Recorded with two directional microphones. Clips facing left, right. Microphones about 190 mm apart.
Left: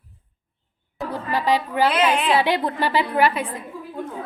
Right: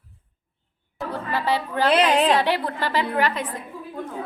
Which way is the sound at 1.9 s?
35° right (ahead or behind).